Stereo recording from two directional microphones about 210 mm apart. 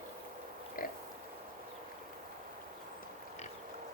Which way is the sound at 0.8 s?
40° left (ahead or behind).